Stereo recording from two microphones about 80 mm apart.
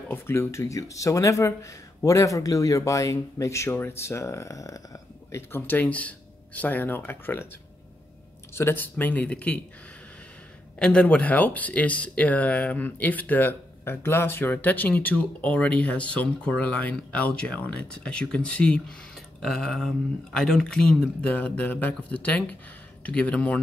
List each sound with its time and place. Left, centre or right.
0.1 s speech: left
5.5 s speech: left
8.5 s speech: left
10.8 s speech: centre
19.1 s a sound: centre
20.3 s speech: centre